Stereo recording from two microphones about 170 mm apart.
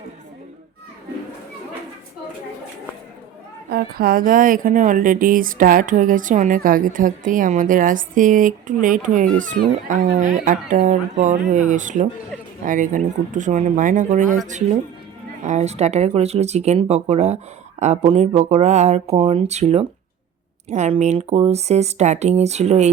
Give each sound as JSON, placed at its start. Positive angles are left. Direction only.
{"t": 3.7, "sound": "speech", "side_deg": -60}